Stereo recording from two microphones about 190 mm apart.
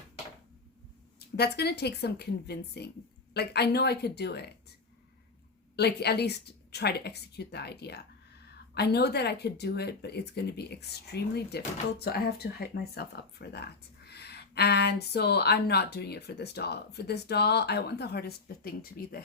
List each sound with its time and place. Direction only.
1.4 s speech: 60° left (ahead or behind)
5.7 s speech: 60° left (ahead or behind)